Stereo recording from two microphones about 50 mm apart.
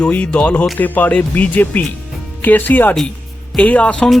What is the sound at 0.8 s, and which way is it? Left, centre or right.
Speech, left.